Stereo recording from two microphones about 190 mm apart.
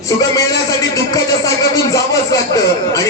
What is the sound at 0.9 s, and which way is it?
Speech, 20° left (ahead or behind).